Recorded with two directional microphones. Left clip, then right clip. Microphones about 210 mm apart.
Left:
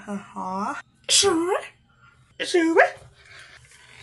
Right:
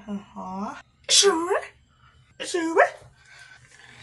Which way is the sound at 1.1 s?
15° left (ahead or behind).